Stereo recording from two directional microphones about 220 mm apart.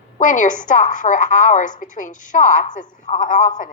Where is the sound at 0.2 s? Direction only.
35° left (ahead or behind).